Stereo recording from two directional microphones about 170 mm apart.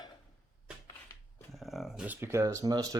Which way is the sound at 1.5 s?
Centre (ahead or behind).